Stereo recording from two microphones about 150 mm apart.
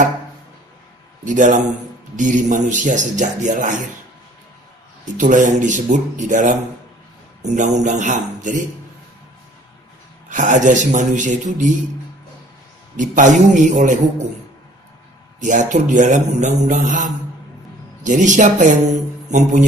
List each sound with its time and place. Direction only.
1.2 s speech: 55° right (ahead or behind)
5.0 s speech: 60° right (ahead or behind)
10.3 s speech: 55° right (ahead or behind)
12.9 s speech: 55° right (ahead or behind)
15.4 s speech: 55° right (ahead or behind)